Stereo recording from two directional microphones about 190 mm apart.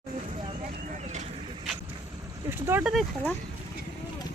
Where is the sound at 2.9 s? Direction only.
10° left (ahead or behind).